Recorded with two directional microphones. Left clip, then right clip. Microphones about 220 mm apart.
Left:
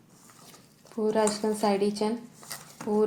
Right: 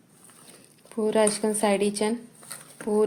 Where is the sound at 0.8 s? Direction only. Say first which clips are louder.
Right 3 dB; 55° right (ahead or behind).